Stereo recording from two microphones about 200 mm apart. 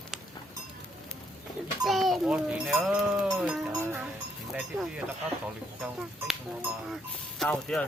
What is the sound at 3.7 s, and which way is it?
Cowbell, 15° right (ahead or behind).